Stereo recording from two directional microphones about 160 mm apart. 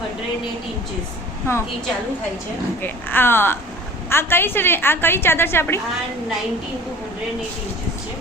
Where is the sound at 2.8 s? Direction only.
15° left (ahead or behind).